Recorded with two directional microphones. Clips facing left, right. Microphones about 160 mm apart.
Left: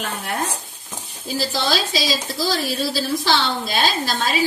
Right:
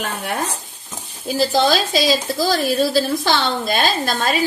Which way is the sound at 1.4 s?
50° right (ahead or behind).